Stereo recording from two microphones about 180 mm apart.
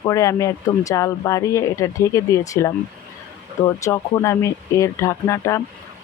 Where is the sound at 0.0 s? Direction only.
20° left (ahead or behind).